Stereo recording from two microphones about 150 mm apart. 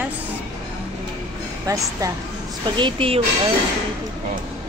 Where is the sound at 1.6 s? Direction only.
20° right (ahead or behind).